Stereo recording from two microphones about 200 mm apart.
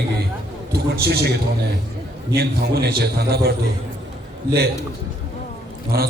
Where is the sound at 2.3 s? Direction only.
50° right (ahead or behind).